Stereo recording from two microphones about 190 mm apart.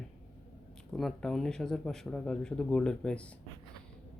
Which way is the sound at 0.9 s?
Centre (ahead or behind).